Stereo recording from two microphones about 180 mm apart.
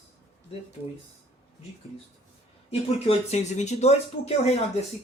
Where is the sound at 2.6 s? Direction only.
35° left (ahead or behind).